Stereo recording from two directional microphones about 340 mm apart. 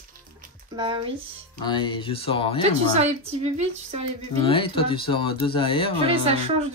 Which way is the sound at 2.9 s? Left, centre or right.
Centre.